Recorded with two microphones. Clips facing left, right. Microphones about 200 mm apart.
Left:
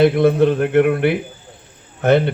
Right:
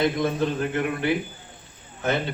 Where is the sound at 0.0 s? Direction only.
65° left (ahead or behind).